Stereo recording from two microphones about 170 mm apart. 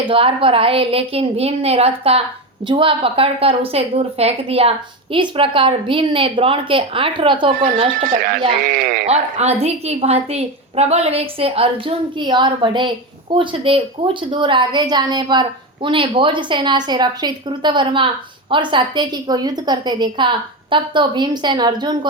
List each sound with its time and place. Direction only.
0.0 s a woman's voice: 30° right (ahead or behind)
8.0 s speech: 55° right (ahead or behind)
9.0 s a woman's voice: 40° right (ahead or behind)